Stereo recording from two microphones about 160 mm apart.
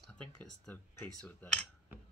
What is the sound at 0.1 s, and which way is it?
Speech, 5° left (ahead or behind).